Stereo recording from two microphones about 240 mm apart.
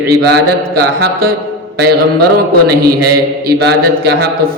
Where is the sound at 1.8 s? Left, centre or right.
Right.